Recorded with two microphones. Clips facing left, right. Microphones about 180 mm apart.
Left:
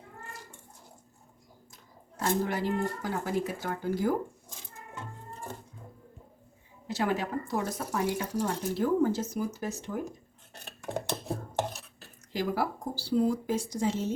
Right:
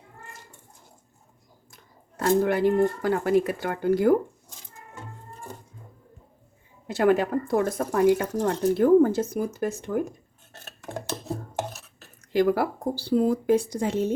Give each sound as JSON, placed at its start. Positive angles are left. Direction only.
{"t": 1.7, "sound": "speech", "side_deg": -60}
{"t": 6.8, "sound": "speech", "side_deg": -60}
{"t": 12.3, "sound": "speech", "side_deg": -60}